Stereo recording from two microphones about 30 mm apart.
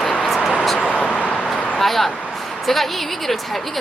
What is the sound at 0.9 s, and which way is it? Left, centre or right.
Vehicle, left.